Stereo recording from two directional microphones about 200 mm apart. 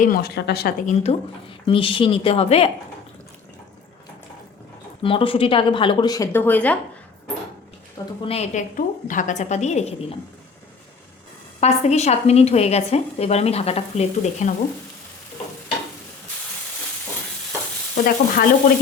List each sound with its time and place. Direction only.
0.0 s speech: 50° left (ahead or behind)
1.0 s a woman's voice: 25° left (ahead or behind)
5.0 s a woman's voice: 25° left (ahead or behind); by 6.7 s 10° left (ahead or behind)
7.9 s a woman's voice: 30° left (ahead or behind)
11.6 s a woman's voice: 35° left (ahead or behind)
17.9 s speech: 45° left (ahead or behind)